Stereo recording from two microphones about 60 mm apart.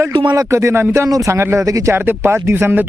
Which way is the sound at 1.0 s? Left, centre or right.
Right.